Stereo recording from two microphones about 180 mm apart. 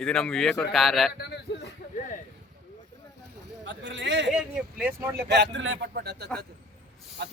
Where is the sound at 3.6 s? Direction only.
90° right.